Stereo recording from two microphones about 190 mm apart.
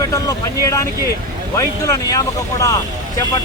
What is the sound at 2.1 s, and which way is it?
Speech, 20° left (ahead or behind).